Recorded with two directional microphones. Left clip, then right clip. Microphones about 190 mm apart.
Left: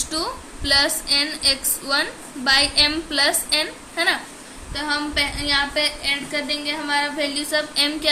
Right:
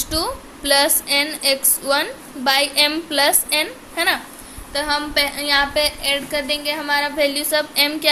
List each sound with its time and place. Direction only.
0.0 s a woman's voice: 30° right (ahead or behind)
4.7 s a woman's voice: 50° right (ahead or behind); by 8.1 s 30° right (ahead or behind)